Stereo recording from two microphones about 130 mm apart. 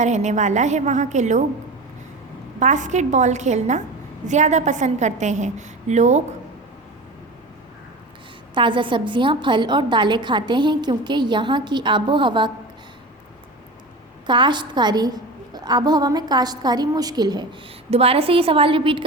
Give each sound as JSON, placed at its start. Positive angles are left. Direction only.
{"t": 0.0, "sound": "a woman's voice", "side_deg": -65}
{"t": 2.6, "sound": "a woman's voice", "side_deg": -70}
{"t": 8.5, "sound": "a woman's voice", "side_deg": -40}
{"t": 14.3, "sound": "a woman's voice", "side_deg": -35}
{"t": 17.9, "sound": "a woman's voice", "side_deg": -50}